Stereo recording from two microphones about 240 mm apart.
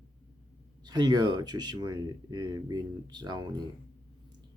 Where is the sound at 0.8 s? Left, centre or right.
Centre.